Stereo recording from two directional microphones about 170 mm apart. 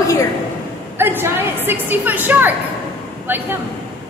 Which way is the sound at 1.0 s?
15° right (ahead or behind).